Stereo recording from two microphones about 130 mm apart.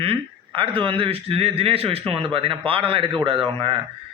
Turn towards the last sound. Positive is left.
turn(degrees=-45)  # may be behind; listen again after turning